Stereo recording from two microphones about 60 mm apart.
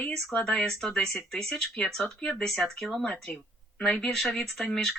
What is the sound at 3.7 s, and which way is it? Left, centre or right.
Speech, centre.